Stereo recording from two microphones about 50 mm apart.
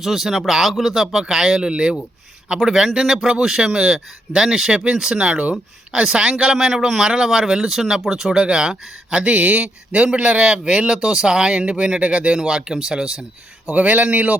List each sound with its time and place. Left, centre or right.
0.0 s speech: centre
13.7 s speech: right